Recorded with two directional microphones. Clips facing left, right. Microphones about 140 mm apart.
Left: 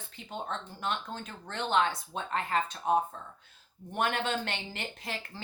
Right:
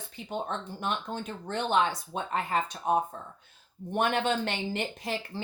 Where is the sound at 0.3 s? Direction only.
15° right (ahead or behind).